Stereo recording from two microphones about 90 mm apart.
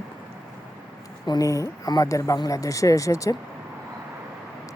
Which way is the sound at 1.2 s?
40° left (ahead or behind).